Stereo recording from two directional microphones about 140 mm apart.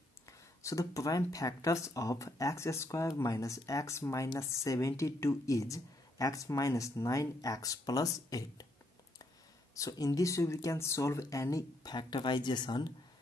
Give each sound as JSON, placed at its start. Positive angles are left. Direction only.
{"t": 0.3, "sound": "speech", "side_deg": 20}
{"t": 9.8, "sound": "speech", "side_deg": 25}